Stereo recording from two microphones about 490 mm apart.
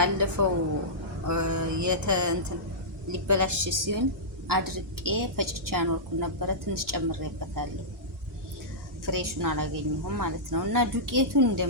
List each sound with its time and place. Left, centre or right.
0.0 s a woman's voice: right
9.0 s a woman's voice: right